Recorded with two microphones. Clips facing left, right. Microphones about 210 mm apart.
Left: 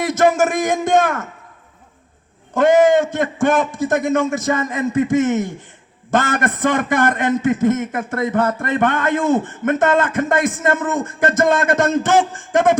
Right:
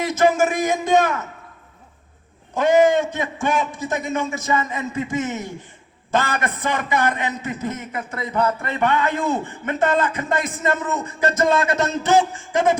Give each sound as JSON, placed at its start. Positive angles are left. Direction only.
{"t": 0.1, "sound": "a man's voice", "side_deg": 45}
{"t": 2.6, "sound": "a man's voice", "side_deg": 50}